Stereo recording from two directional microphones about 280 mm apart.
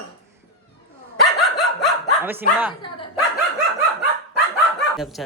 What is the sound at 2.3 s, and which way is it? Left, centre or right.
Speech, centre.